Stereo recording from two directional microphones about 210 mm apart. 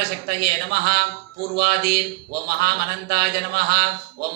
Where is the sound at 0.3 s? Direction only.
50° right (ahead or behind).